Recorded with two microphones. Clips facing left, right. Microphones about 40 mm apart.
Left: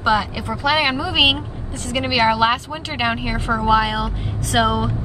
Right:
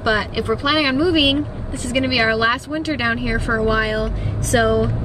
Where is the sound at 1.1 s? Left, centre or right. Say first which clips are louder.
Even; left.